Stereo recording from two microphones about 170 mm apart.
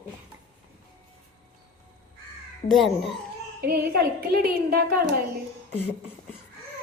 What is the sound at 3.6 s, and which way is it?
A woman's voice, 65° right (ahead or behind).